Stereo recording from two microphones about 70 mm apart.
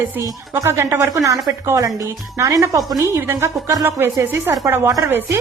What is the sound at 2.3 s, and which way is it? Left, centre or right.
Speech, right.